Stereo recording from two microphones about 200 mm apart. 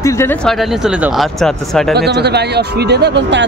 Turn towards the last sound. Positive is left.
turn(degrees=-60)  # may be behind; listen again after turning